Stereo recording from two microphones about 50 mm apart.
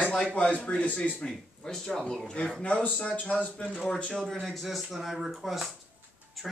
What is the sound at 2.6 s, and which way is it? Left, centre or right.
Speech, left.